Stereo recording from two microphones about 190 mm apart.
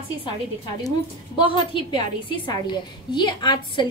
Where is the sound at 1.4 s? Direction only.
25° left (ahead or behind).